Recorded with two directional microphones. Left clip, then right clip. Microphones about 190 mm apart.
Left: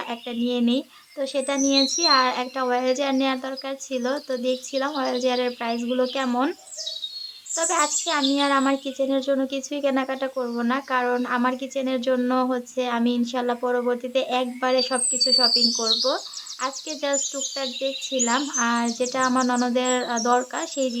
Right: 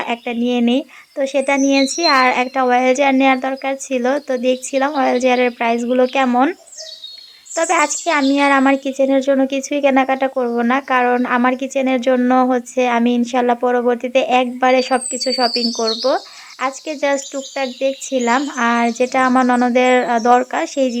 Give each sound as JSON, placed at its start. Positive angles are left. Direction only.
{"t": 0.0, "sound": "speech", "side_deg": -25}